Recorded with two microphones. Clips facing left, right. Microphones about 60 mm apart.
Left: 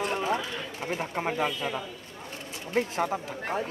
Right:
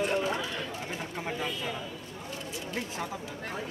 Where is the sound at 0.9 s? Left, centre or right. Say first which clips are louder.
Left 5 dB; left.